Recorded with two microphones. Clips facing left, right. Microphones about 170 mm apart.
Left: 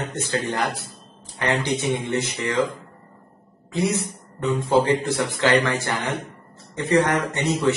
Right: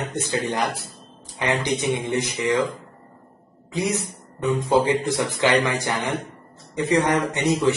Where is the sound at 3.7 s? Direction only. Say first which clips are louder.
Left 1 dB; 15° right (ahead or behind).